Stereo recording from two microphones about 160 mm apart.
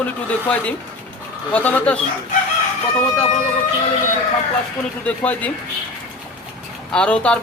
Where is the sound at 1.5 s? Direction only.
10° left (ahead or behind).